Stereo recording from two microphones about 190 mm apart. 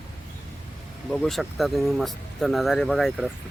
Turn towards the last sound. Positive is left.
turn(degrees=0)  # may be behind; listen again after turning